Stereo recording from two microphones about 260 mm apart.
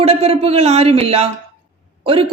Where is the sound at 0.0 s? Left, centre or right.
Right.